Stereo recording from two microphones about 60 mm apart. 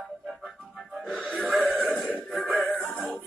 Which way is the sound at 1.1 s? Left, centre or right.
Centre.